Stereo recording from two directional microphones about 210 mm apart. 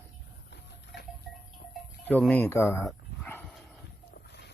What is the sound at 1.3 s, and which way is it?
Livestock, 5° left (ahead or behind).